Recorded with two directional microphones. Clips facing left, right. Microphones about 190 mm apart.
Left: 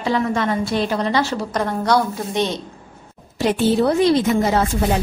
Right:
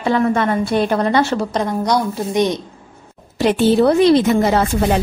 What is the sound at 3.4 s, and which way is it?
Speech, 70° right (ahead or behind).